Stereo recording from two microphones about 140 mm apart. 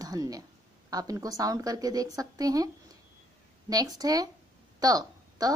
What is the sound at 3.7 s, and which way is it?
Speech, 25° right (ahead or behind).